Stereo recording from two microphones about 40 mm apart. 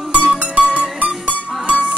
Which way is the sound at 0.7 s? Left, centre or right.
Right.